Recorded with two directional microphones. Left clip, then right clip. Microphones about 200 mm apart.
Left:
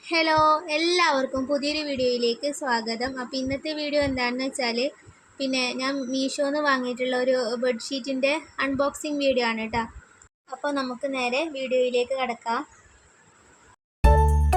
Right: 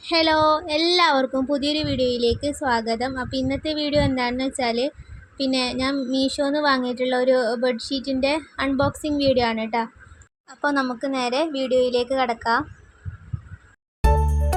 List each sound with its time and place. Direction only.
0.0 s speech: 15° right (ahead or behind)
14.0 s music: centre (ahead or behind)